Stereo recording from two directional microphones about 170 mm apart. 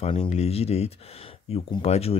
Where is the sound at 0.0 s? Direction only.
35° left (ahead or behind).